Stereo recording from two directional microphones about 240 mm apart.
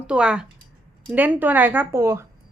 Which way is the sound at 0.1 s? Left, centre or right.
Centre.